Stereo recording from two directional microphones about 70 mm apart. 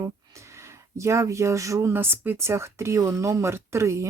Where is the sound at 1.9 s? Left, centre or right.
Right.